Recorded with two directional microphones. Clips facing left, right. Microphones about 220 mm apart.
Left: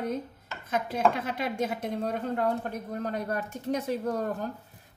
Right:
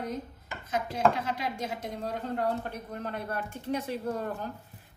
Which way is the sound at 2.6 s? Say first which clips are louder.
Left 4 dB; 45° left (ahead or behind).